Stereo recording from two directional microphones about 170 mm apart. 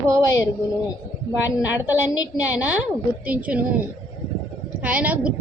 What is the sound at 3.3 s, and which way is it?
Speech, 10° right (ahead or behind).